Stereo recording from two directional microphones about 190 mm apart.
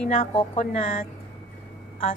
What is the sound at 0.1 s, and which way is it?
Speech, 45° left (ahead or behind).